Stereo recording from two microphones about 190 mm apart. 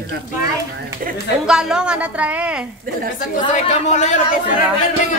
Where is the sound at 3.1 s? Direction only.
40° left (ahead or behind).